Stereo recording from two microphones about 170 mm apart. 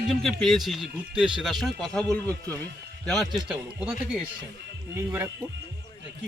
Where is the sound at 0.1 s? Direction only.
Centre (ahead or behind).